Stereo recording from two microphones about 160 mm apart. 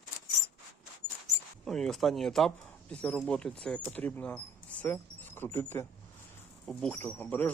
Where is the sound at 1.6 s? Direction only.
5° left (ahead or behind).